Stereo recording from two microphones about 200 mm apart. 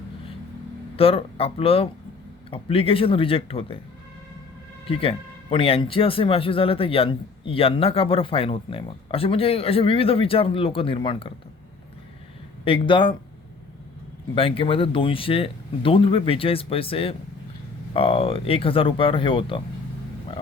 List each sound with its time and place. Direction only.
0.9 s speech: 30° left (ahead or behind)
4.9 s speech: 30° left (ahead or behind)
12.6 s speech: 25° left (ahead or behind)
14.3 s speech: 25° left (ahead or behind)